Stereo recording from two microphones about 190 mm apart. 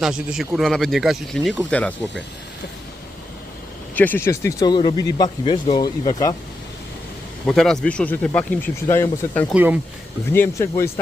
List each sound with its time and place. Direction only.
0.0 s speech: 5° right (ahead or behind)
3.9 s speech: 10° left (ahead or behind)
7.4 s speech: centre (ahead or behind)
9.5 s speech: 10° right (ahead or behind)
10.3 s speech: 15° left (ahead or behind)